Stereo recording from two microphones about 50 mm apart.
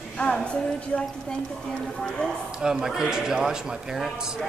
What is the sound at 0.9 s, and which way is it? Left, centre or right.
Speech, centre.